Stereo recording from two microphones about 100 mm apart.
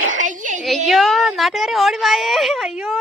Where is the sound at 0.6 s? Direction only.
Centre (ahead or behind).